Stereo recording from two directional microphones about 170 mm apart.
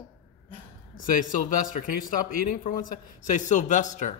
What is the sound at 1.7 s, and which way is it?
Speech, 50° left (ahead or behind).